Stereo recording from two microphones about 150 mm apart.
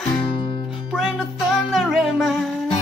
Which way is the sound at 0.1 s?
35° left (ahead or behind).